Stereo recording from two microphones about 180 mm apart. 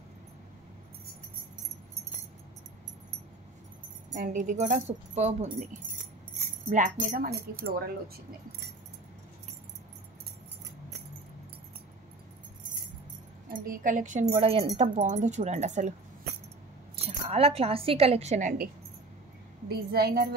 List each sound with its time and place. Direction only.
4.1 s speech: 45° right (ahead or behind)
13.5 s speech: 50° right (ahead or behind)
14.3 s speech: 35° right (ahead or behind)
16.9 s a woman's voice: 35° right (ahead or behind)
19.7 s a woman's voice: 60° right (ahead or behind)